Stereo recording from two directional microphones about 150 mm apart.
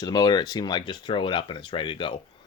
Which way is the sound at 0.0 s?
25° left (ahead or behind).